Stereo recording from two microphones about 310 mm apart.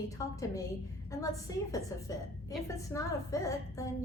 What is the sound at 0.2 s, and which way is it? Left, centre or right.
A woman's voice, centre.